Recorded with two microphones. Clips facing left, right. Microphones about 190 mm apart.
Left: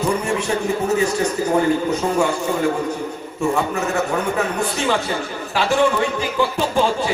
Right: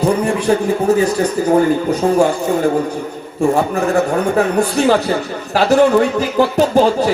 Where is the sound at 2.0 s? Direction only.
50° right (ahead or behind).